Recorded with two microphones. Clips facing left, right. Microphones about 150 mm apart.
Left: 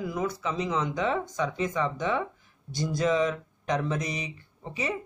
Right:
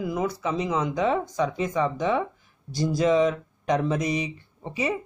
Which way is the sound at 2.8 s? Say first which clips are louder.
Right 4 dB; 30° right (ahead or behind).